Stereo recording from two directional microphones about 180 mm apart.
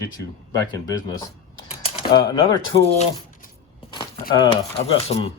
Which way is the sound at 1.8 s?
30° left (ahead or behind).